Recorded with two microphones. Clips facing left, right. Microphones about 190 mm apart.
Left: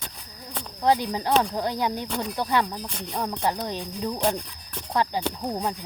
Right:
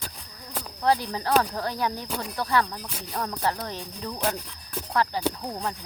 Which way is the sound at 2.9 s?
5° right (ahead or behind).